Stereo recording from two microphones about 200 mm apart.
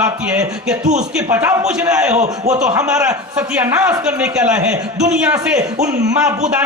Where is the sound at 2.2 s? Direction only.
35° right (ahead or behind).